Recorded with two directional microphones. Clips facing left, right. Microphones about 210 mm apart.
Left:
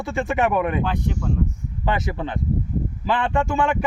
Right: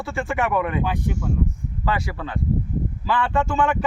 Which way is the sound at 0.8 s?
10° right (ahead or behind).